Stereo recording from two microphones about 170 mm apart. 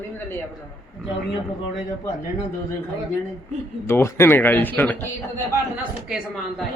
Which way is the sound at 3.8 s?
15° left (ahead or behind).